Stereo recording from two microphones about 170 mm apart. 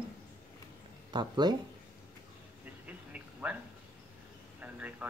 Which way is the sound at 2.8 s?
10° right (ahead or behind).